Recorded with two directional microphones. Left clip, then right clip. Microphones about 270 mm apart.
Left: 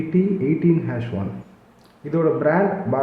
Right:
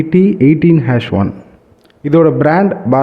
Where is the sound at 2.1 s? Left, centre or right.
Right.